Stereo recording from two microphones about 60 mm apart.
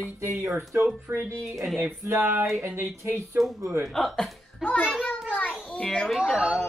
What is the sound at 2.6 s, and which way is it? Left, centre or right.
Speech, right.